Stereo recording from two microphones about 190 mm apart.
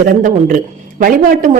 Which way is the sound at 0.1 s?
45° right (ahead or behind).